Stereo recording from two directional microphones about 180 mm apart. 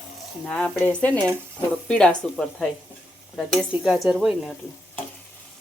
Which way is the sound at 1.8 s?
5° left (ahead or behind).